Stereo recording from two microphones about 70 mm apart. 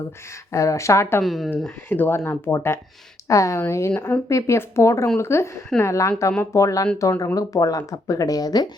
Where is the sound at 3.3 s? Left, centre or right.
Left.